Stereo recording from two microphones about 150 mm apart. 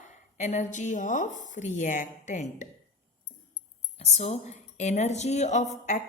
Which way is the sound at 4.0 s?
45° left (ahead or behind).